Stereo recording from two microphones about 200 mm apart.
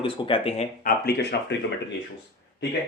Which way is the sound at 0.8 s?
50° left (ahead or behind).